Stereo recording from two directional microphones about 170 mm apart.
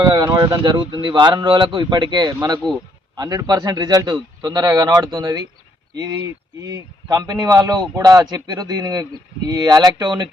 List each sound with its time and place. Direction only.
0.1 s a man's voice: 25° right (ahead or behind)